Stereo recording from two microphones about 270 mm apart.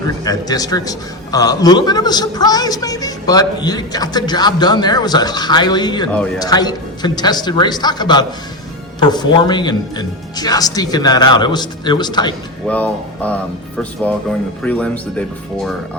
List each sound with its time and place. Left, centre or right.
0.3 s a man's voice: centre
6.1 s speech: centre
6.4 s a man's voice: centre
12.6 s speech: centre
14.6 s speech: centre